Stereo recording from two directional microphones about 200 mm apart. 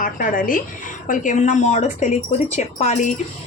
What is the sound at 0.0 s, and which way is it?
Speech, 45° left (ahead or behind).